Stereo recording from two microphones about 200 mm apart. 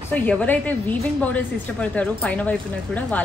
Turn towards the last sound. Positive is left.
turn(degrees=5)  # may be behind; listen again after turning